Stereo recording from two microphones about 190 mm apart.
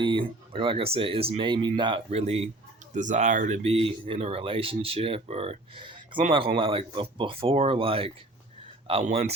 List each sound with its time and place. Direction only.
0.0 s speech: 25° right (ahead or behind)